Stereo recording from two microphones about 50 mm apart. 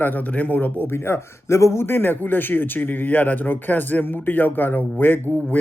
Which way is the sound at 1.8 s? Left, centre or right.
Left.